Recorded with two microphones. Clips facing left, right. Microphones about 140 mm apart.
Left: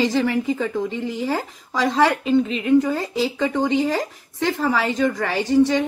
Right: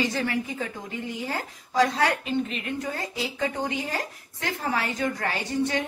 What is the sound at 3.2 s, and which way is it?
A woman's voice, 90° left.